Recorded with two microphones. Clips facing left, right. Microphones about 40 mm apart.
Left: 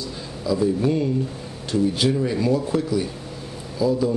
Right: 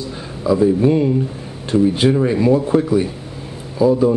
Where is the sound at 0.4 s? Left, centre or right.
Right.